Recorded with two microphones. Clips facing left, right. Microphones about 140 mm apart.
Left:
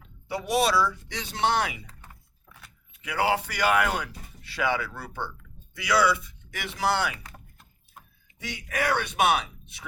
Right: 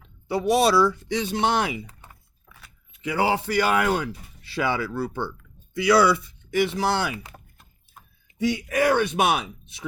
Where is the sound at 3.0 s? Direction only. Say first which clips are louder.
Right 3 dB; 30° right (ahead or behind).